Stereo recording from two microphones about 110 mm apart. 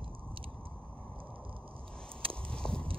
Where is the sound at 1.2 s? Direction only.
55° right (ahead or behind).